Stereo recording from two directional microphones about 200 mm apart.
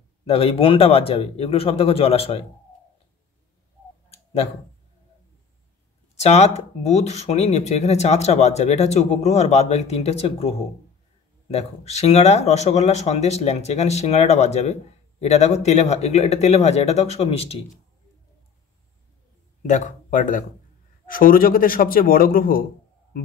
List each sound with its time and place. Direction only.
0.3 s speech: 30° left (ahead or behind)
4.1 s clicking: 30° left (ahead or behind)
6.2 s speech: 35° left (ahead or behind)
19.6 s a man's voice: 40° left (ahead or behind)